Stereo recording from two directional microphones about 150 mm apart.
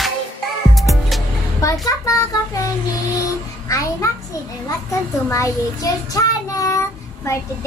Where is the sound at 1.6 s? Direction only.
20° left (ahead or behind).